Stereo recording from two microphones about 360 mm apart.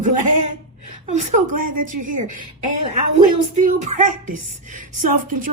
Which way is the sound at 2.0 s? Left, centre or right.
Right.